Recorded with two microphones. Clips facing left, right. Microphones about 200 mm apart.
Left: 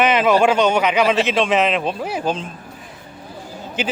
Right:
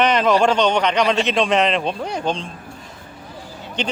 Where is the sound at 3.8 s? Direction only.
5° left (ahead or behind).